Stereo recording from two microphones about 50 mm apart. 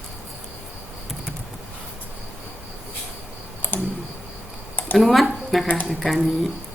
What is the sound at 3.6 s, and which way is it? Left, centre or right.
Computer keyboard, left.